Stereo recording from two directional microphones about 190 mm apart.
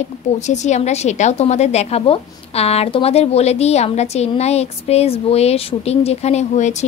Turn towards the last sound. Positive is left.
turn(degrees=35)  # may be behind; listen again after turning